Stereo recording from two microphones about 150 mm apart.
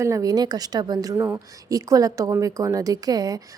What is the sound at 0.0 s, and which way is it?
A woman's voice, 20° right (ahead or behind).